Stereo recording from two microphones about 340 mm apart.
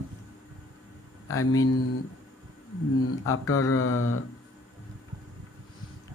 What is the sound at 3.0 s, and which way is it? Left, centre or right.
Speech, left.